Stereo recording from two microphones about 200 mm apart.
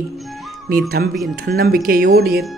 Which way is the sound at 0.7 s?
45° right (ahead or behind).